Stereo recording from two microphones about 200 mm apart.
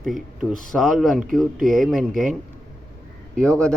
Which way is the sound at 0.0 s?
Centre (ahead or behind).